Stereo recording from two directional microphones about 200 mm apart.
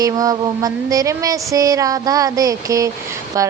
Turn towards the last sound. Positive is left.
turn(degrees=-15)  # may be behind; listen again after turning